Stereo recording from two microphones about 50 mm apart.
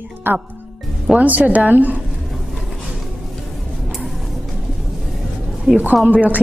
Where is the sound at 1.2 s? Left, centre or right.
Right.